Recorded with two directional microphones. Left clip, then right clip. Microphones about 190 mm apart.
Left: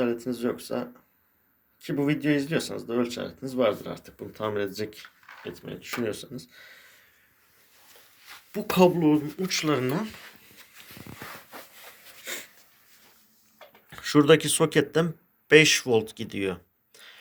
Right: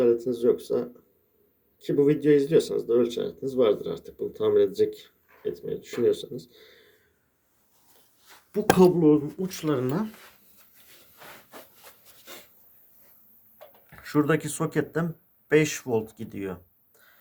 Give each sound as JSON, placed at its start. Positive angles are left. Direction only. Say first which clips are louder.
{"t": 0.0, "sound": "speech", "louder": "right 6 dB", "side_deg": 15}
{"t": 1.9, "sound": "speech", "louder": "right 6 dB", "side_deg": 15}
{"t": 8.5, "sound": "speech", "louder": "right 2 dB", "side_deg": -10}
{"t": 13.9, "sound": "a sound", "louder": "left 6 dB", "side_deg": 5}
{"t": 14.4, "sound": "speech", "louder": "left 5 dB", "side_deg": 0}